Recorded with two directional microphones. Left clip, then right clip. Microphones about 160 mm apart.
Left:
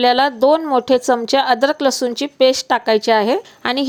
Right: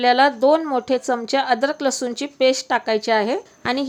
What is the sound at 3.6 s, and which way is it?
Speech, 30° left (ahead or behind).